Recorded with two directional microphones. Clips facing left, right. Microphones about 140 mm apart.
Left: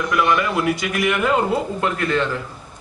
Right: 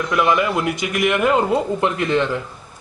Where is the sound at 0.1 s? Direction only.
20° right (ahead or behind).